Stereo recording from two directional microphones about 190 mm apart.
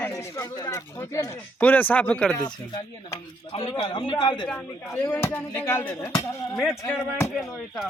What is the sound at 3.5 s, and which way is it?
Speech, 30° left (ahead or behind).